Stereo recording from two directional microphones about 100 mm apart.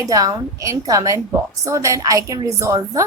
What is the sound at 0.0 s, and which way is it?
A woman's voice, 35° right (ahead or behind).